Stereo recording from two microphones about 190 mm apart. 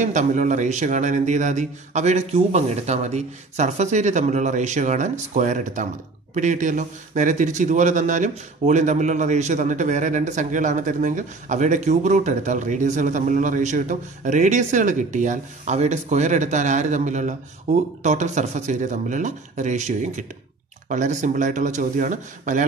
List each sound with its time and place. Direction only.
0.0 s speech: 40° right (ahead or behind)